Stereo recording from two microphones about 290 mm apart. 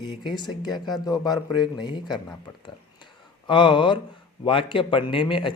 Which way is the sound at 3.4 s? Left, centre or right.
Centre.